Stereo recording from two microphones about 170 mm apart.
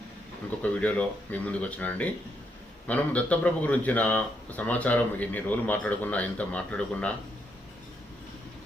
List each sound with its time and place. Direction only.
0.6 s speech: 10° left (ahead or behind)